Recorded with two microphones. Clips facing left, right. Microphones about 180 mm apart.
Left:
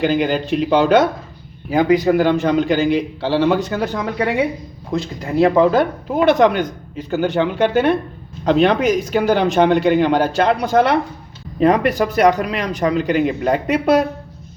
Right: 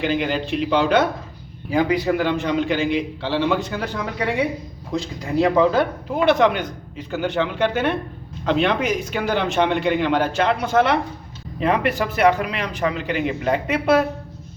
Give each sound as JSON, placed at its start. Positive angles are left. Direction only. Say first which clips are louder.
{"t": 0.0, "sound": "speech", "louder": "left 5 dB", "side_deg": 40}
{"t": 4.9, "sound": "speech", "louder": "left 4 dB", "side_deg": 55}